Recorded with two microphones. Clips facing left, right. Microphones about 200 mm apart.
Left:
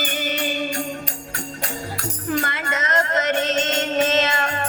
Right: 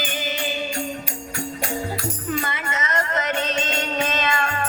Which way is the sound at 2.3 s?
50° left (ahead or behind).